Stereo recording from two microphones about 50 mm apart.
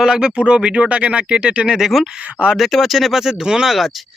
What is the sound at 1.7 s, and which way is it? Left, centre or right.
Speech, centre.